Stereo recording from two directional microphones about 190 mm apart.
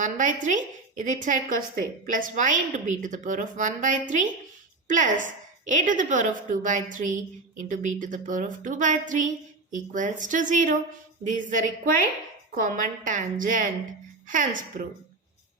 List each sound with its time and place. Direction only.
0.0 s a woman's voice: 40° right (ahead or behind)